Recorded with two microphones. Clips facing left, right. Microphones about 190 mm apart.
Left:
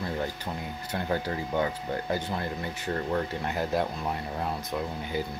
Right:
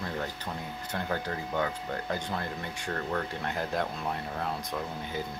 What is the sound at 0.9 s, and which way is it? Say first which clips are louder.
Speech: left 3 dB; 15° left (ahead or behind).